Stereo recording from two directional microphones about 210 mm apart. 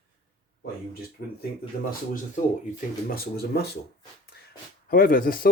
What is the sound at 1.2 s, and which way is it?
Speech, 50° left (ahead or behind).